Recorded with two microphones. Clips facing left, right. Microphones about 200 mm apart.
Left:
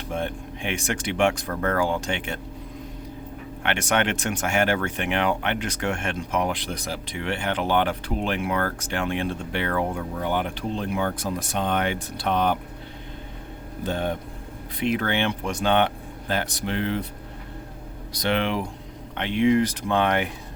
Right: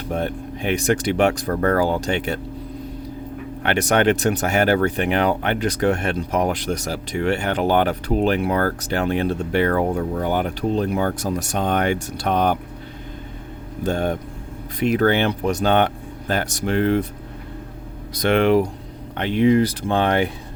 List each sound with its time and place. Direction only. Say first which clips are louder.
0.1 s speech: right 4 dB; 40° right (ahead or behind)
3.6 s speech: right 6 dB; 35° right (ahead or behind)
13.8 s speech: right 5 dB; 45° right (ahead or behind)
18.1 s speech: right 8 dB; 50° right (ahead or behind); by 20.3 s 35° right (ahead or behind)